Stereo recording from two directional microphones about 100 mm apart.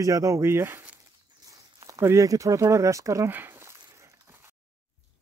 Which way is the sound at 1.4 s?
35° right (ahead or behind).